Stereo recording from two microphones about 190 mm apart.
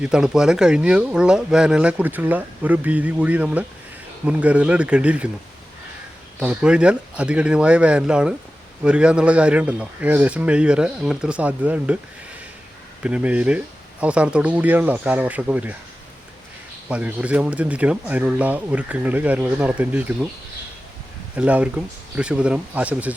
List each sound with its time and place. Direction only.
0.0 s speech: 5° right (ahead or behind)
6.4 s speech: 5° right (ahead or behind)
13.0 s speech: 5° right (ahead or behind)
16.9 s speech: 10° right (ahead or behind)
21.3 s speech: 5° right (ahead or behind)